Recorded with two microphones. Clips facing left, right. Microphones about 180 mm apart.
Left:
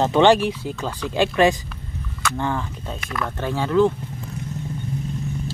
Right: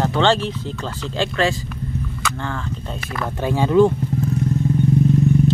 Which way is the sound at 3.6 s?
15° right (ahead or behind).